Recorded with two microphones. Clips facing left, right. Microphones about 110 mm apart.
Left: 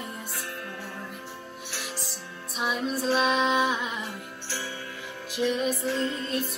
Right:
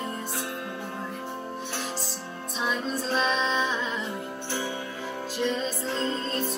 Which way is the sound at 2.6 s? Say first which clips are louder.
Left 2 dB; 10° left (ahead or behind).